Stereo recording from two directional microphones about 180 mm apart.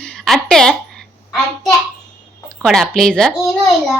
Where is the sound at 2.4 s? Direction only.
5° left (ahead or behind).